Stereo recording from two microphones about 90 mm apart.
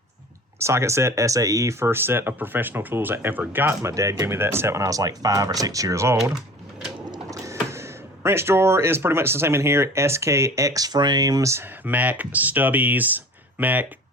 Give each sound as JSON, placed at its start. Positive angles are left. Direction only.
{"t": 0.6, "sound": "speech", "side_deg": -30}
{"t": 3.9, "sound": "speech", "side_deg": -35}
{"t": 7.3, "sound": "speech", "side_deg": -35}
{"t": 11.5, "sound": "speech", "side_deg": -20}